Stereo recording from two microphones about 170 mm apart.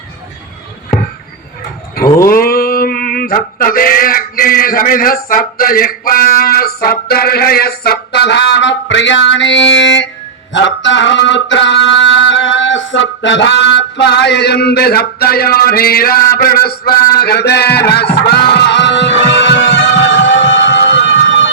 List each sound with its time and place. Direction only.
2.2 s male singing: 60° left (ahead or behind); by 10.1 s 90° left
10.5 s a sound: 90° left; by 16.2 s 60° left (ahead or behind)
16.3 s mantra: 65° left (ahead or behind)
17.2 s music: 70° left (ahead or behind); by 21.5 s 90° left